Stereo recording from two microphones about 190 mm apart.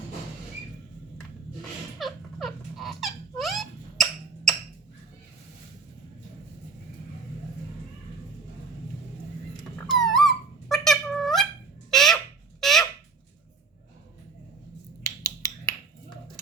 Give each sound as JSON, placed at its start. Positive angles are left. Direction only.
{"t": 2.0, "sound": "squeak", "side_deg": 0}
{"t": 10.0, "sound": "a sound", "side_deg": 0}
{"t": 11.9, "sound": "fowl", "side_deg": 0}
{"t": 12.5, "sound": "goose", "side_deg": 0}
{"t": 15.0, "sound": "finger snapping", "side_deg": 20}